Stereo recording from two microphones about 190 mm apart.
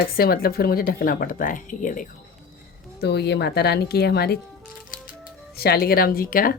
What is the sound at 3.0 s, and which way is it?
Speech, 60° left (ahead or behind).